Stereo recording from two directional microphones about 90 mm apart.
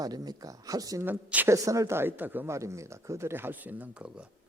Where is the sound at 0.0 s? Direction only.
45° right (ahead or behind).